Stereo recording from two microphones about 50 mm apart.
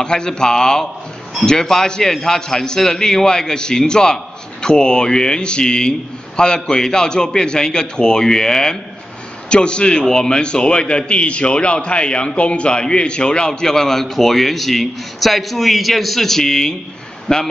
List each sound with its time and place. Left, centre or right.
0.0 s a man's voice: centre